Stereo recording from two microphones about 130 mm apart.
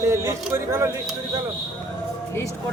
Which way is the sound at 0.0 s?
25° right (ahead or behind).